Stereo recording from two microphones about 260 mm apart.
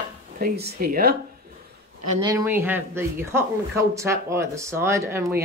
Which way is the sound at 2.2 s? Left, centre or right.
Centre.